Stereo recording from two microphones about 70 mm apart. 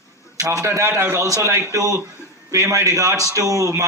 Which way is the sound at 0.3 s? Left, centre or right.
Right.